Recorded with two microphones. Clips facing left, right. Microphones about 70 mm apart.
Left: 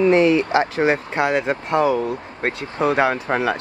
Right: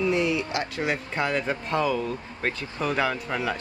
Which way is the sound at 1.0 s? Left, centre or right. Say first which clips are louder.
Left 7 dB; left.